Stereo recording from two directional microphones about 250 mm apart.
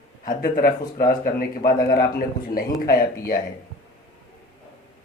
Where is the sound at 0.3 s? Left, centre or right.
Left.